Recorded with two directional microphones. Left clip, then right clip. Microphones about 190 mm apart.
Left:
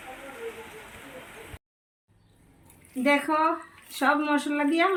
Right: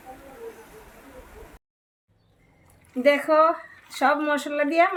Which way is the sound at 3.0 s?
65° right (ahead or behind).